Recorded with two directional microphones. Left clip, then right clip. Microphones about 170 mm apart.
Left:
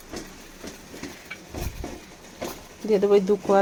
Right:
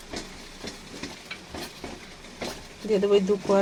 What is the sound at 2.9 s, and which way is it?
Speech, 20° left (ahead or behind).